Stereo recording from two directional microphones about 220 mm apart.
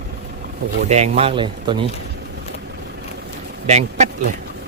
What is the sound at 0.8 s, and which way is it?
Speech, 30° right (ahead or behind).